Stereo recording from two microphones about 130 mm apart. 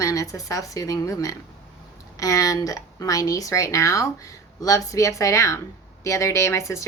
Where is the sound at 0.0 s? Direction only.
25° left (ahead or behind).